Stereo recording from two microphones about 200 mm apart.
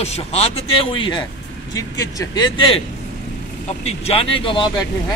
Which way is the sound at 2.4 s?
25° left (ahead or behind).